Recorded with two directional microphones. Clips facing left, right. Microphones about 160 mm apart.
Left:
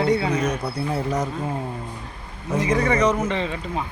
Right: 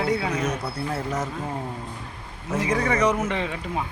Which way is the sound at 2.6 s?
5° right (ahead or behind).